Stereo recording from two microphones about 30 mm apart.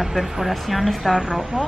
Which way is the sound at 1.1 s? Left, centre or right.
Centre.